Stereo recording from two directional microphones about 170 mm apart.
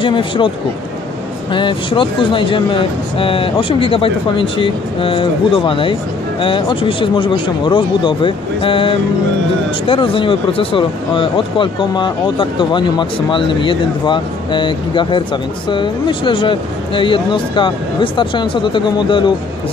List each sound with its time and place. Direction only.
0.0 s speech: 30° left (ahead or behind)
1.5 s speech: 30° left (ahead or behind)